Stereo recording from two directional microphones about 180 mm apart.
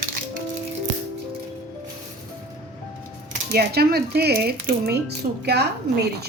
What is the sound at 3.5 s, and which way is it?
A woman's voice, 60° right (ahead or behind).